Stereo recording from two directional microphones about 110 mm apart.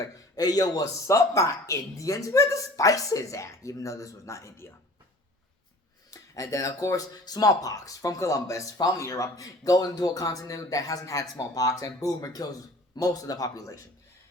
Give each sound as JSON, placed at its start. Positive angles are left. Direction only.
{"t": 0.0, "sound": "speech", "side_deg": 35}
{"t": 6.1, "sound": "speech", "side_deg": 30}